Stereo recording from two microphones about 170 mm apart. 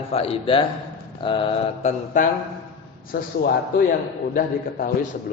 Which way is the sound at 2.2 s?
50° left (ahead or behind).